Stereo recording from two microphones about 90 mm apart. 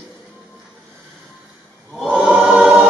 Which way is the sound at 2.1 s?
15° right (ahead or behind).